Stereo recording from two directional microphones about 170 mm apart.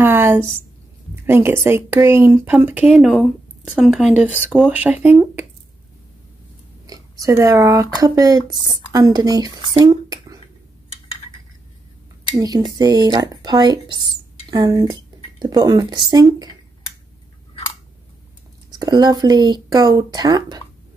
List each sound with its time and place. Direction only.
0.0 s speech: 15° right (ahead or behind)
6.9 s speech: 20° right (ahead or behind)
9.8 s squish: 20° right (ahead or behind)
12.4 s speech: 20° right (ahead or behind)
18.7 s speech: 25° right (ahead or behind)